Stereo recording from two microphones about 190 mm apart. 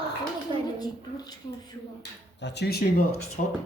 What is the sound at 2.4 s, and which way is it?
Speech, 65° left (ahead or behind).